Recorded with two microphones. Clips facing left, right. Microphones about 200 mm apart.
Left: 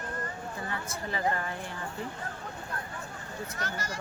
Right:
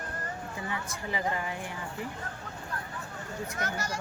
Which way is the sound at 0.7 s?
15° right (ahead or behind).